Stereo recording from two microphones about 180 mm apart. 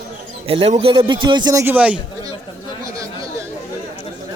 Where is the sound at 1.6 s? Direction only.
10° right (ahead or behind).